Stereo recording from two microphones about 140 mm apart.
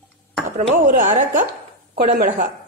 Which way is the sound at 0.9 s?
60° right (ahead or behind).